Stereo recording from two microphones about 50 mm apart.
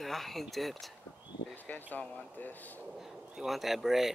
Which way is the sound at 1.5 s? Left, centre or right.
Left.